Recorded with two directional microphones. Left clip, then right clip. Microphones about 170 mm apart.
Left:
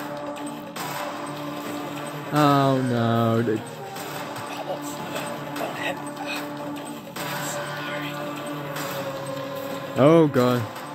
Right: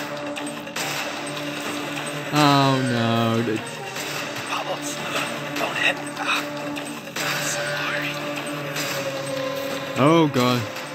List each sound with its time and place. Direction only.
2.3 s speech: 15° right (ahead or behind)
5.8 s speech: 10° left (ahead or behind)
9.9 s speech: 10° right (ahead or behind)